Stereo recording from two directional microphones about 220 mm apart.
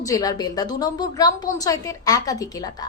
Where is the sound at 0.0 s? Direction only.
15° left (ahead or behind).